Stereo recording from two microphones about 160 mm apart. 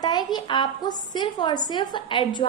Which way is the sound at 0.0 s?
25° left (ahead or behind).